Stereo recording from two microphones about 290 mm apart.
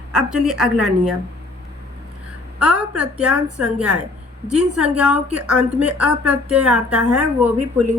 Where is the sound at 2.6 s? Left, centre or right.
Centre.